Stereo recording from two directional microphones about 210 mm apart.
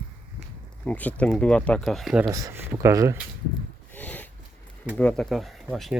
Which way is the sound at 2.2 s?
15° right (ahead or behind).